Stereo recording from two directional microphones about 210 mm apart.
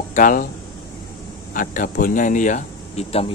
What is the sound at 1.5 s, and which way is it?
Speech, 40° left (ahead or behind).